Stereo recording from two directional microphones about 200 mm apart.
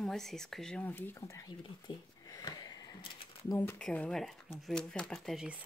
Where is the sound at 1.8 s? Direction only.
20° left (ahead or behind).